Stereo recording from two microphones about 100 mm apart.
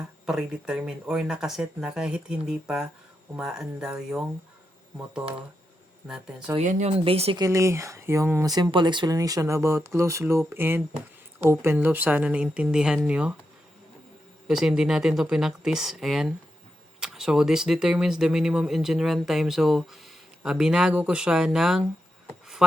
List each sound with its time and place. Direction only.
0.3 s speech: 5° right (ahead or behind)
6.5 s speech: 25° right (ahead or behind)
6.8 s speech: 75° right (ahead or behind)
7.3 s speech: 30° right (ahead or behind)
8.4 s speech: 45° right (ahead or behind)
9.0 s speech: 35° right (ahead or behind); by 13.3 s 10° right (ahead or behind)
14.4 s speech: 5° right (ahead or behind)